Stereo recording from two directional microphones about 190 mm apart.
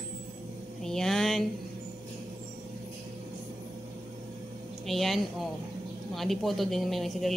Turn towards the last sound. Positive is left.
turn(degrees=0)  # may be behind; listen again after turning